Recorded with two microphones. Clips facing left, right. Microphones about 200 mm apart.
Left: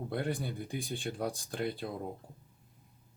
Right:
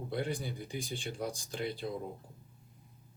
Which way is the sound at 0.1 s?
55° left (ahead or behind).